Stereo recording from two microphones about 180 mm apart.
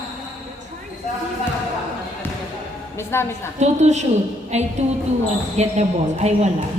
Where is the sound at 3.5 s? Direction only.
40° right (ahead or behind).